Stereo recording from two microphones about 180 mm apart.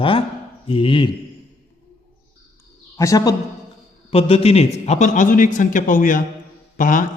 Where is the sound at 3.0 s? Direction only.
20° left (ahead or behind).